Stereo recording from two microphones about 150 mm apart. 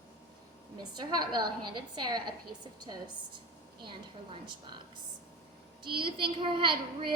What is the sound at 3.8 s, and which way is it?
Speech, 35° right (ahead or behind).